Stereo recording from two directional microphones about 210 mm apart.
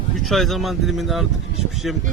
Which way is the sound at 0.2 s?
Centre (ahead or behind).